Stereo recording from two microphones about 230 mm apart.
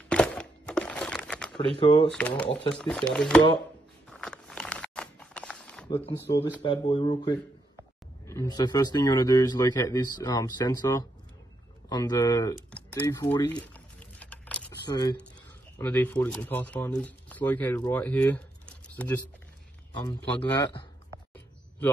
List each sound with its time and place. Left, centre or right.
0.1 s crumpling: centre
1.8 s speech: left
2.0 s speech: centre
4.1 s a sound: centre
6.6 s speech: left
13.9 s a sound: centre
14.9 s speech: centre
15.8 s speech: centre